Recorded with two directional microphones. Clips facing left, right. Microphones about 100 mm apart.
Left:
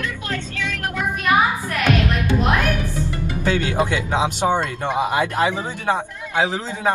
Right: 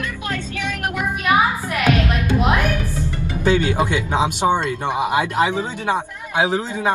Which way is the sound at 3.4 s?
15° right (ahead or behind).